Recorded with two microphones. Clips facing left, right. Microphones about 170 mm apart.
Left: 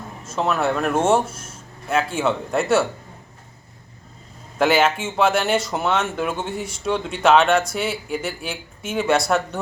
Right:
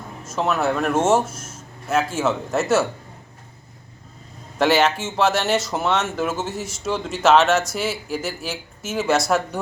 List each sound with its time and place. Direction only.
0.3 s speech: centre (ahead or behind)
1.2 s speech: 30° left (ahead or behind)
1.9 s speech: centre (ahead or behind)
4.5 s speech: centre (ahead or behind)